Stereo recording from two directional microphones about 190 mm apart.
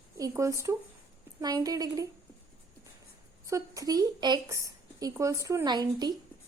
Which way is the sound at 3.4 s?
15° right (ahead or behind).